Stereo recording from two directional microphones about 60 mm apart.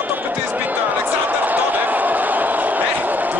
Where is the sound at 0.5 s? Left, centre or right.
Right.